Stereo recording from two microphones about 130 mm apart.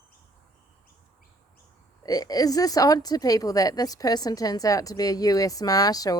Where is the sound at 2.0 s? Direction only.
30° left (ahead or behind).